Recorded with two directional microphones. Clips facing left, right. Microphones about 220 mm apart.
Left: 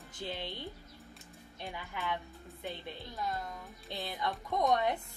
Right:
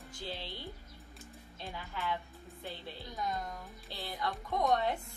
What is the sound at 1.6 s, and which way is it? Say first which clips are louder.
Child singing: even; 15° left (ahead or behind).